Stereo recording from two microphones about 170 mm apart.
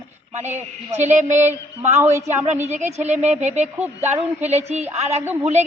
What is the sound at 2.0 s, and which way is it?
Speech, 15° right (ahead or behind).